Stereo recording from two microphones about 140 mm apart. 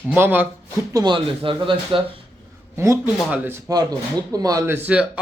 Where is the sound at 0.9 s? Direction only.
35° right (ahead or behind).